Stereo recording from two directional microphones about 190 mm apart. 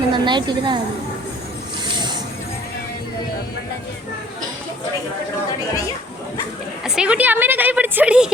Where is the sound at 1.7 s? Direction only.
25° right (ahead or behind).